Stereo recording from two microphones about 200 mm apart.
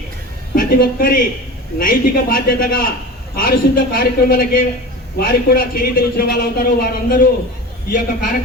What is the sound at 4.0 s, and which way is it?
A man's voice, 45° left (ahead or behind).